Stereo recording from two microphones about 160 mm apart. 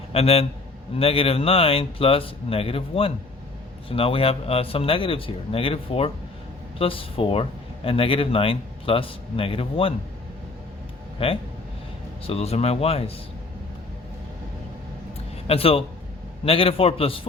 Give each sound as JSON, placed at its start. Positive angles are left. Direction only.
{"t": 0.1, "sound": "a man's voice", "side_deg": 40}
{"t": 11.2, "sound": "speech", "side_deg": 35}
{"t": 15.4, "sound": "speech", "side_deg": 35}